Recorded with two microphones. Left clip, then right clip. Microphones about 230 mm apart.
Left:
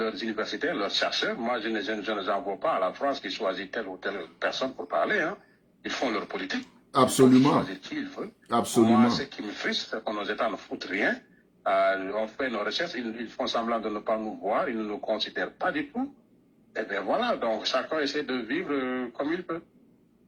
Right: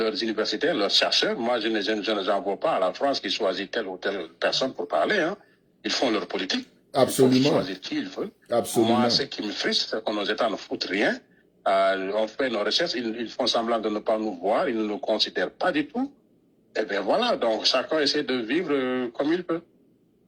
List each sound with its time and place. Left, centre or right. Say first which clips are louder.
0.0 s speech: right 5 dB; right
8.4 s speech: right 1 dB; centre
8.8 s speech: right 1 dB; right